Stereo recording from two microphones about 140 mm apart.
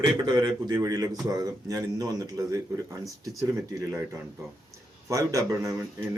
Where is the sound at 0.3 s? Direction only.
30° right (ahead or behind).